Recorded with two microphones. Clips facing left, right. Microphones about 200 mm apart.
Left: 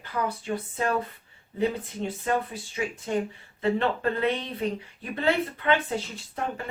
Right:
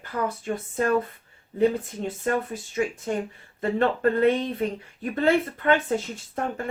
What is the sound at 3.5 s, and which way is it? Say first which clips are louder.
Speech: right 2 dB; 50° right (ahead or behind).